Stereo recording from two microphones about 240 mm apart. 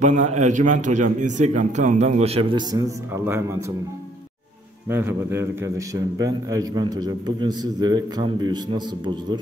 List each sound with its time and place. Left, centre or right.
0.0 s a man's voice: right; by 3.4 s centre
4.8 s a man's voice: centre